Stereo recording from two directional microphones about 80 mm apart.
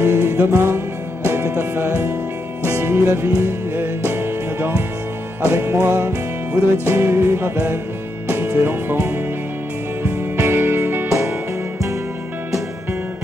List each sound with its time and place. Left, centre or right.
0.0 s music: right
11.1 s music: right